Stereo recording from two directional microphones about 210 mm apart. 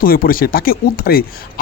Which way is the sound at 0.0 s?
45° left (ahead or behind).